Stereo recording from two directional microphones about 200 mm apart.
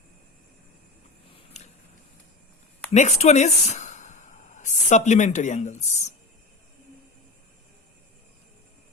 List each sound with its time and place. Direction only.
2.9 s speech: 35° left (ahead or behind)